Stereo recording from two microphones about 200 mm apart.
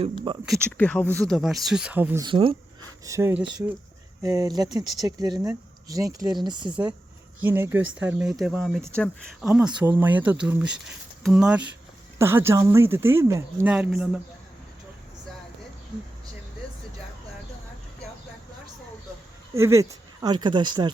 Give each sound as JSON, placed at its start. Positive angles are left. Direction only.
{"t": 0.4, "sound": "speech", "side_deg": 5}
{"t": 2.2, "sound": "speech", "side_deg": -25}
{"t": 3.1, "sound": "speech", "side_deg": -15}
{"t": 7.4, "sound": "speech", "side_deg": -10}
{"t": 19.5, "sound": "speech", "side_deg": -15}